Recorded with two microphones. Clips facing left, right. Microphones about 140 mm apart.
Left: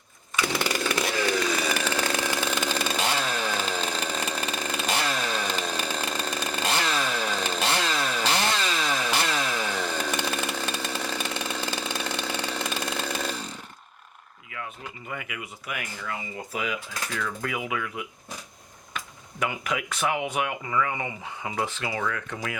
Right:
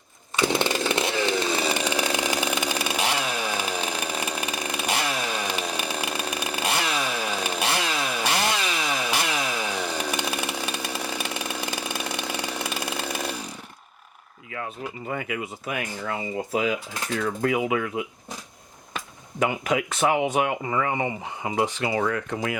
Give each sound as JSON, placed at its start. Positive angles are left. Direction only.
{"t": 0.3, "sound": "chainsaw", "side_deg": -25}
{"t": 1.8, "sound": "chainsaw", "side_deg": -15}
{"t": 14.5, "sound": "speech", "side_deg": -35}
{"t": 21.8, "sound": "speech", "side_deg": -35}